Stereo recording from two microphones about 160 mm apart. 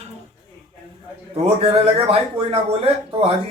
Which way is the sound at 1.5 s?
40° right (ahead or behind).